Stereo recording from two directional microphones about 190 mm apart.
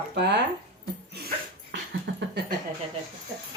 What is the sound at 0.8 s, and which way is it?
Dog, 55° right (ahead or behind).